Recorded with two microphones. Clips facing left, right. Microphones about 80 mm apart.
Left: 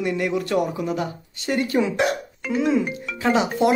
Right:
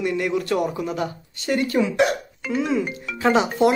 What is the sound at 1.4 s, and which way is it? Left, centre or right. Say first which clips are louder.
Speech: even; centre.